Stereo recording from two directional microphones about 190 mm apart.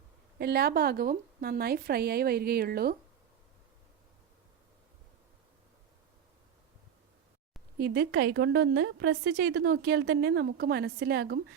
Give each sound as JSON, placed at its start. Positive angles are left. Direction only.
{"t": 0.3, "sound": "speech", "side_deg": -55}
{"t": 7.8, "sound": "a woman's voice", "side_deg": -60}